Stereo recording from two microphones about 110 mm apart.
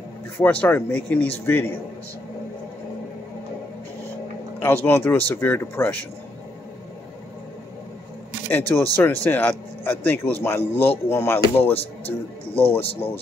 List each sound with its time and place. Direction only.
0.4 s speech: 15° left (ahead or behind)
4.6 s speech: 20° left (ahead or behind)
8.5 s speech: 15° left (ahead or behind)